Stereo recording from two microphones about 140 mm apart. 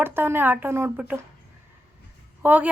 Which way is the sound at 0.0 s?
15° right (ahead or behind).